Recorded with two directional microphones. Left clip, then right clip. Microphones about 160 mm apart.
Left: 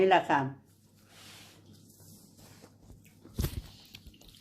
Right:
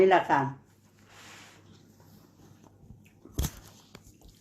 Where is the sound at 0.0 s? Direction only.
Centre (ahead or behind).